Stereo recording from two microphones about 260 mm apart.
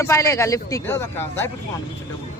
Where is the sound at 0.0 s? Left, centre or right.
Centre.